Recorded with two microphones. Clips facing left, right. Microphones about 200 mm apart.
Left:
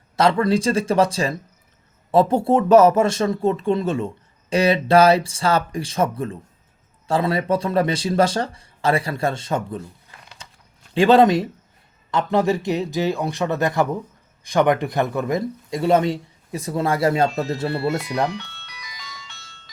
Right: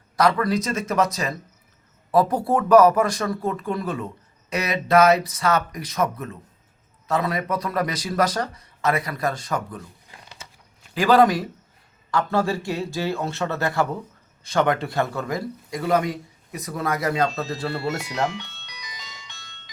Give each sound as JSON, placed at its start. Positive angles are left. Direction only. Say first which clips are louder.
{"t": 0.2, "sound": "speech", "louder": "left 3 dB", "side_deg": 25}
{"t": 10.9, "sound": "speech", "louder": "left 3 dB", "side_deg": 25}
{"t": 18.3, "sound": "ice cream truck", "louder": "left 2 dB", "side_deg": -15}